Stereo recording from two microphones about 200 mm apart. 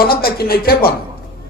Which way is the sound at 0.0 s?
50° left (ahead or behind).